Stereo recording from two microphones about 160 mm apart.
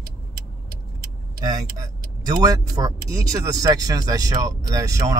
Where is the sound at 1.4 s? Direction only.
25° right (ahead or behind).